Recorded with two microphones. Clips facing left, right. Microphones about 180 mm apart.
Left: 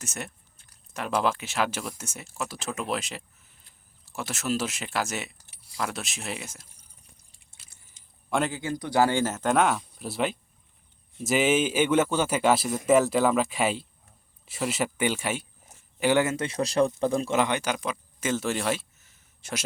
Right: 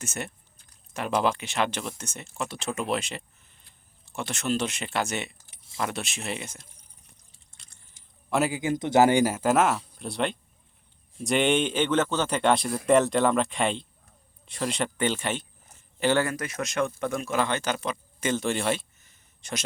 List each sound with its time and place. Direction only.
0.0 s a man's voice: centre (ahead or behind)
7.3 s drip: 5° left (ahead or behind)
8.3 s a man's voice: 5° right (ahead or behind)